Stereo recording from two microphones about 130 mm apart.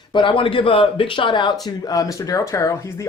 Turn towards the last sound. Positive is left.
turn(degrees=25)  # may be behind; listen again after turning